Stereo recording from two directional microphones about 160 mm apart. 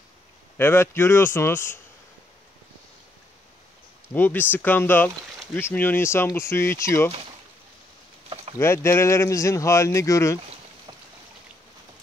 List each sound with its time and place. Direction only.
0.6 s speech: 15° left (ahead or behind)
4.1 s speech: 10° left (ahead or behind)
8.5 s speech: 15° left (ahead or behind)